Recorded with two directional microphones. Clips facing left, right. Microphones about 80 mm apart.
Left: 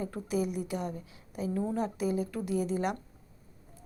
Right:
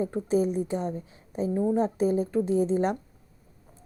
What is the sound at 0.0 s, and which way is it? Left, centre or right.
A woman's voice, right.